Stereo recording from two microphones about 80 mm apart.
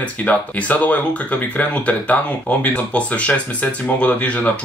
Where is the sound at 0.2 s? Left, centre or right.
Centre.